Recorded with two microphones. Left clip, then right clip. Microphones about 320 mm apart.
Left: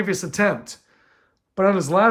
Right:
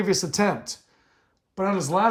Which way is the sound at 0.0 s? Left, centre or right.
Centre.